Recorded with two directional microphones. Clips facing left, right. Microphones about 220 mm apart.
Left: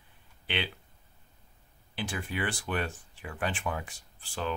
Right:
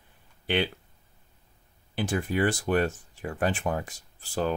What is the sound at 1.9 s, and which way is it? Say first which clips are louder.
Speech: right 8 dB; 45° right (ahead or behind).